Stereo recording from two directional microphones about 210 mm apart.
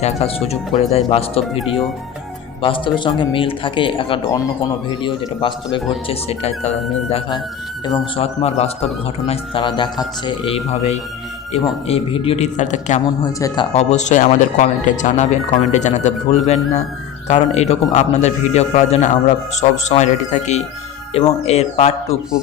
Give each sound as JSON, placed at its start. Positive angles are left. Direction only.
{"t": 0.0, "sound": "speech", "side_deg": 30}
{"t": 2.6, "sound": "speech", "side_deg": 25}